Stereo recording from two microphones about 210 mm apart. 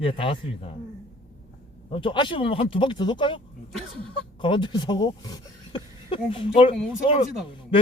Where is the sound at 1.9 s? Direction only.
25° left (ahead or behind).